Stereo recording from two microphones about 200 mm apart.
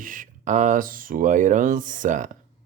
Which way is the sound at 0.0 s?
40° right (ahead or behind).